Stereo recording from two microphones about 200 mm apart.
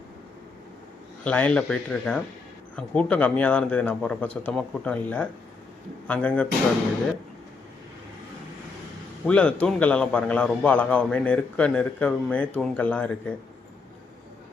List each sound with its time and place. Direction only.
1.2 s a man's voice: 5° left (ahead or behind)
9.2 s a man's voice: 5° left (ahead or behind)